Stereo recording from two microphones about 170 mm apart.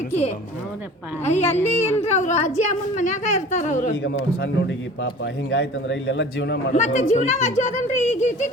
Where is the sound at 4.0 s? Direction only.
90° left.